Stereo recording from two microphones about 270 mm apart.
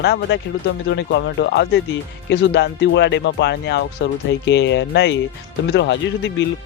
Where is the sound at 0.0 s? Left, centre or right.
Left.